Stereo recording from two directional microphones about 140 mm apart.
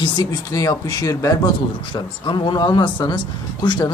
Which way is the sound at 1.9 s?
35° left (ahead or behind).